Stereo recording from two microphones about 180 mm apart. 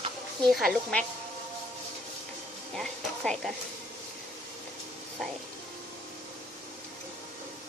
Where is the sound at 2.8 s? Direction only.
Centre (ahead or behind).